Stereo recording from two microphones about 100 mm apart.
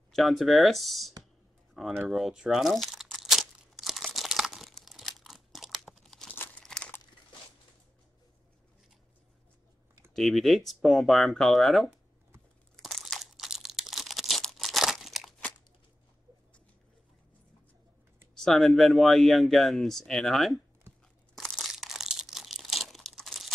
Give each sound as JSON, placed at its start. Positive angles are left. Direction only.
{"t": 0.1, "sound": "speech", "side_deg": 0}
{"t": 1.7, "sound": "a sound", "side_deg": 0}
{"t": 2.0, "sound": "crumpling", "side_deg": -5}
{"t": 10.1, "sound": "speech", "side_deg": 0}
{"t": 12.7, "sound": "crumpling", "side_deg": 0}
{"t": 18.3, "sound": "speech", "side_deg": 5}
{"t": 20.9, "sound": "crunch", "side_deg": -25}
{"t": 21.4, "sound": "crumpling", "side_deg": 0}